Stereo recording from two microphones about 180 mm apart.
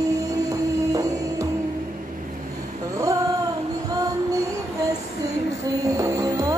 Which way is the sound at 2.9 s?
20° right (ahead or behind).